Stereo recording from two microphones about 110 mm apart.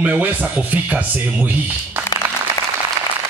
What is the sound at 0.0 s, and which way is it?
Speech, 15° right (ahead or behind).